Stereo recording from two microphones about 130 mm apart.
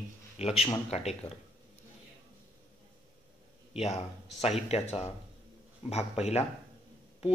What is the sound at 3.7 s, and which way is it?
A man's voice, 55° left (ahead or behind).